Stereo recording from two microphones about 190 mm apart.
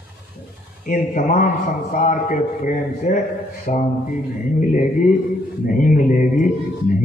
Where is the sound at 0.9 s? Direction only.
40° left (ahead or behind).